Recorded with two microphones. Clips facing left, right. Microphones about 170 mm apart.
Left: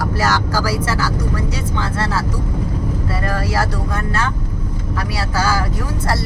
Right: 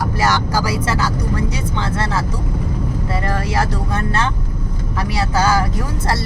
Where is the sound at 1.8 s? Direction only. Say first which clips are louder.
Even; 20° right (ahead or behind).